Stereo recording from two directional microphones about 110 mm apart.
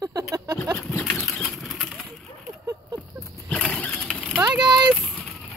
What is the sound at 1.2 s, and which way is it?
Bird flight, centre (ahead or behind).